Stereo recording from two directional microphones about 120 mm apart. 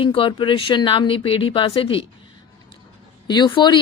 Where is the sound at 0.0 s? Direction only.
45° left (ahead or behind).